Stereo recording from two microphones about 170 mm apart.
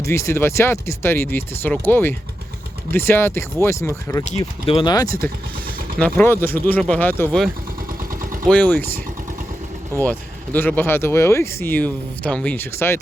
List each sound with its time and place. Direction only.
0.0 s speech: 15° left (ahead or behind)
4.3 s speech: 35° left (ahead or behind)
6.0 s speech: 10° left (ahead or behind)
8.4 s speech: 10° left (ahead or behind)
10.0 s speech: 10° left (ahead or behind)